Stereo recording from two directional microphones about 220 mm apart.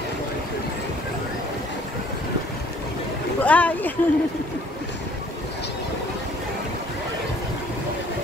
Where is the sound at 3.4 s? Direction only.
5° left (ahead or behind).